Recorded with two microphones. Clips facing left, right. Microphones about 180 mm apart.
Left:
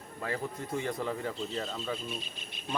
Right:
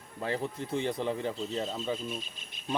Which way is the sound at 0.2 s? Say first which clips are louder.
Right 3 dB; 25° right (ahead or behind).